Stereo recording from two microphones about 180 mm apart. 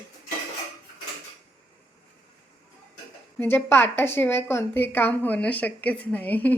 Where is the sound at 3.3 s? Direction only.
10° left (ahead or behind).